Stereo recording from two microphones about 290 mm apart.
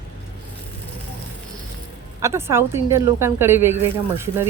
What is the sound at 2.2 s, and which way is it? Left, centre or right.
Speech, centre.